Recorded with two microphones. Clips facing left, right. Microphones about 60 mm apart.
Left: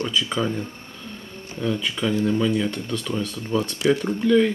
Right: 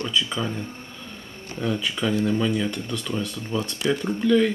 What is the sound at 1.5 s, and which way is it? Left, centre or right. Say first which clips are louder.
Speech: left 1 dB; centre.